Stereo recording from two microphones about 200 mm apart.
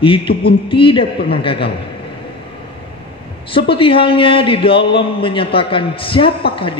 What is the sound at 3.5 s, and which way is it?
A man's voice, 25° left (ahead or behind).